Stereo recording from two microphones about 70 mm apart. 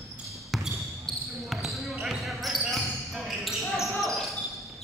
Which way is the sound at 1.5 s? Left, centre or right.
Centre.